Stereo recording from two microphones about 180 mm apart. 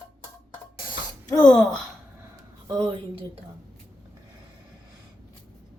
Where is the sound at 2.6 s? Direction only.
25° right (ahead or behind).